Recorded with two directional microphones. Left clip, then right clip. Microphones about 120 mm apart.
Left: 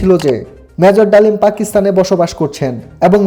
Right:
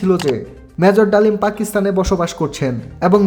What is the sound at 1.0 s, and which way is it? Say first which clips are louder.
Speech: left 5 dB; 15° left (ahead or behind).